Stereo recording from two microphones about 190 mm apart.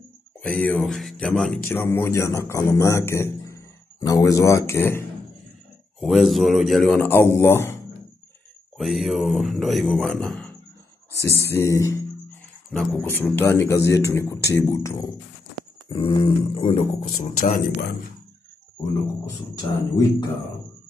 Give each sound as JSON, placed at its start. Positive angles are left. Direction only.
{"t": 0.4, "sound": "speech", "side_deg": 5}
{"t": 5.9, "sound": "a man's voice", "side_deg": 0}
{"t": 8.7, "sound": "a man's voice", "side_deg": 0}
{"t": 11.4, "sound": "speech", "side_deg": 15}
{"t": 15.9, "sound": "speech", "side_deg": 25}
{"t": 19.2, "sound": "speech", "side_deg": 20}